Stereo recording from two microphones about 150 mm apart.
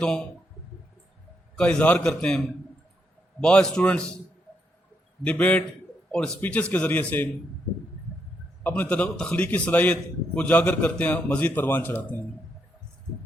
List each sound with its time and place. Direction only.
1.5 s a man's voice: 5° left (ahead or behind)
3.4 s a man's voice: 5° left (ahead or behind)
5.2 s a man's voice: 10° left (ahead or behind)
8.6 s a man's voice: 10° left (ahead or behind)